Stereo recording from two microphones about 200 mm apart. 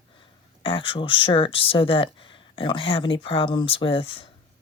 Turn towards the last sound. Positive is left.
turn(degrees=30)  # may be behind; listen again after turning